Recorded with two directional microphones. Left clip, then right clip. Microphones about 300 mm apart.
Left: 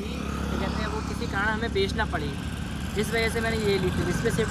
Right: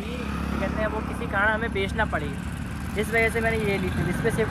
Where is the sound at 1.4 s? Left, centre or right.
Centre.